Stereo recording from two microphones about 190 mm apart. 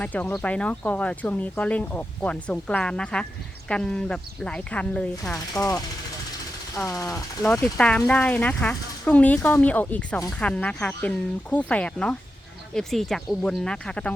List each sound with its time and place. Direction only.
0.0 s speech: 5° left (ahead or behind)
5.5 s speech: 15° left (ahead or behind)
7.1 s speech: 5° left (ahead or behind)